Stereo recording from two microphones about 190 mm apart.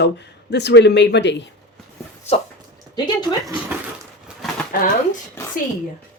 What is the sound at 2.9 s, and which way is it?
Speech, 25° left (ahead or behind).